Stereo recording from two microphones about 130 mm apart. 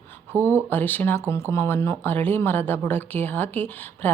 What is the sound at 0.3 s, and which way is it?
Speech, 15° right (ahead or behind).